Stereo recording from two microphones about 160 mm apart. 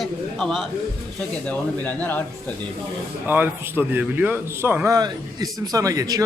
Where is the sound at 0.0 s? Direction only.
Centre (ahead or behind).